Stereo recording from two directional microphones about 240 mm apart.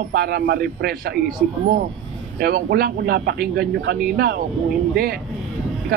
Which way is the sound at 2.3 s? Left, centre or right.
Right.